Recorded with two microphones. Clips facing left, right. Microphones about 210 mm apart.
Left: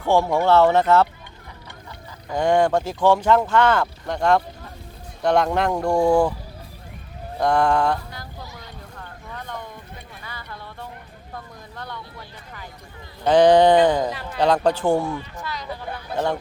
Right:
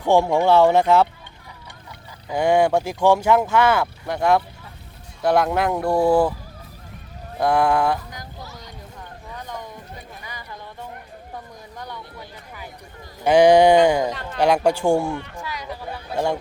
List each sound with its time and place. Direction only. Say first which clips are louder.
0.0 s speech: right 2 dB; 15° right (ahead or behind)
2.3 s speech: right 1 dB; 10° right (ahead or behind)
7.3 s a sound: even; 5° right (ahead or behind)
11.3 s vehicle: left 1 dB; 10° right (ahead or behind)
13.2 s speech: right 1 dB; 10° right (ahead or behind)
14.1 s speech: right 1 dB; 5° left (ahead or behind)
14.3 s speech: right 1 dB; 10° right (ahead or behind)
15.4 s a sound: even; 10° right (ahead or behind)